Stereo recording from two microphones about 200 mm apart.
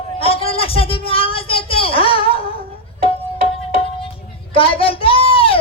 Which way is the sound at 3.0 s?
25° left (ahead or behind).